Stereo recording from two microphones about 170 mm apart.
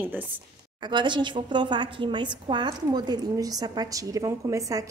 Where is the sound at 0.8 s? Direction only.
25° right (ahead or behind).